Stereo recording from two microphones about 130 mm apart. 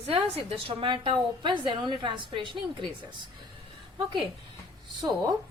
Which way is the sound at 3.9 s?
40° right (ahead or behind).